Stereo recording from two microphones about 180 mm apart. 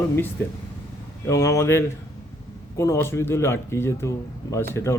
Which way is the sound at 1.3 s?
15° left (ahead or behind).